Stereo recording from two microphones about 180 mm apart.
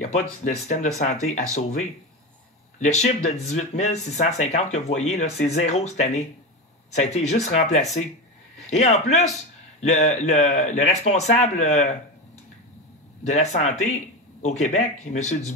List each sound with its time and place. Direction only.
0.0 s a man's voice: 40° left (ahead or behind)
13.3 s speech: 40° left (ahead or behind)